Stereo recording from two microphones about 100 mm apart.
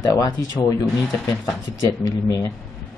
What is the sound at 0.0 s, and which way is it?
Speech, 35° left (ahead or behind).